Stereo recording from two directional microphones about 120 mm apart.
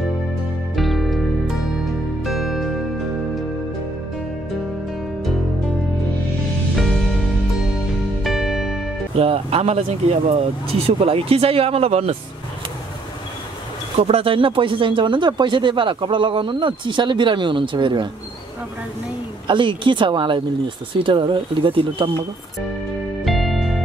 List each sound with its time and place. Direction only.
0.7 s music: centre (ahead or behind)
6.7 s music: centre (ahead or behind)
8.2 s music: centre (ahead or behind)
9.1 s speech: 55° right (ahead or behind)
13.9 s speech: 55° right (ahead or behind)
19.4 s speech: 45° right (ahead or behind)
23.2 s music: centre (ahead or behind)